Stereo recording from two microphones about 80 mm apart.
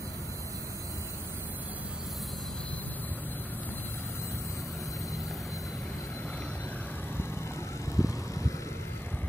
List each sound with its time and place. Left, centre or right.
7.9 s vehicle: left